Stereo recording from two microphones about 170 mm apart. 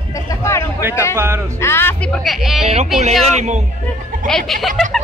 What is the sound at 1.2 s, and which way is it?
Speech, 15° right (ahead or behind).